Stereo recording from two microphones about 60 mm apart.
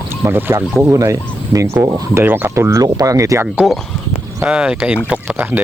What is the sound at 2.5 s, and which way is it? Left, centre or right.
Speech, right.